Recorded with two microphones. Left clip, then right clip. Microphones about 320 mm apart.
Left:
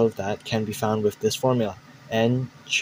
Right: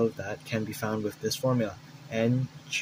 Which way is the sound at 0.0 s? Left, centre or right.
Centre.